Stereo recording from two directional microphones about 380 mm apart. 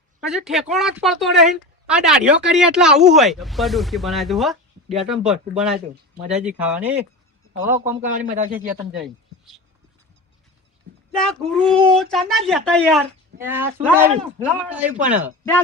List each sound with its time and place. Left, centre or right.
0.2 s a man's voice: centre
8.0 s a man's voice: centre
11.2 s speech: centre